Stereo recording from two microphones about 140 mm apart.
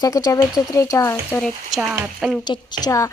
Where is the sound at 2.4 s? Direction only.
30° left (ahead or behind).